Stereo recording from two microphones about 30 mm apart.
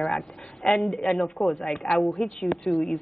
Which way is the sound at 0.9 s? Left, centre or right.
Left.